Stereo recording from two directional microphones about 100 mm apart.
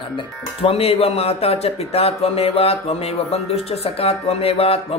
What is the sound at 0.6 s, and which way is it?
Speech, 85° left.